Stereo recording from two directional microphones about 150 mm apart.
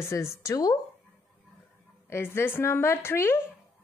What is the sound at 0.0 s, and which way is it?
Speech, 20° left (ahead or behind).